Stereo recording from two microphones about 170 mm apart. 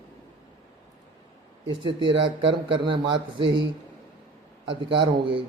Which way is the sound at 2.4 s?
30° right (ahead or behind).